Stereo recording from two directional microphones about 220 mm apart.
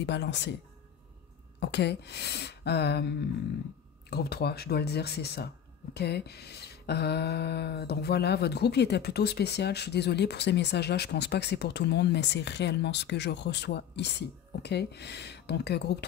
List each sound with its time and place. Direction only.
0.0 s speech: 50° left (ahead or behind)
1.6 s speech: 50° left (ahead or behind)
4.1 s speech: 45° left (ahead or behind)